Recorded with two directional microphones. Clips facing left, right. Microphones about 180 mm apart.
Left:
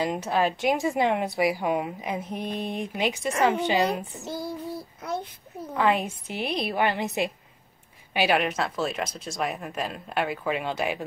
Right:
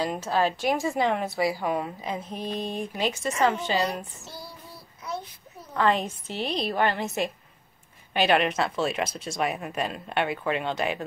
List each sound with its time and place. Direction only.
0.0 s a woman's voice: 20° left (ahead or behind)
4.3 s child singing: 50° left (ahead or behind)
5.8 s a woman's voice: 10° left (ahead or behind)